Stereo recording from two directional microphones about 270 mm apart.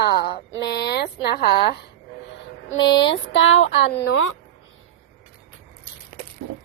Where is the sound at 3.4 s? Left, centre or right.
Left.